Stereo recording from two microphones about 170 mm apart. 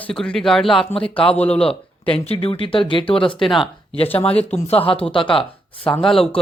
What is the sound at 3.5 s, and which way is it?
Speech, centre (ahead or behind).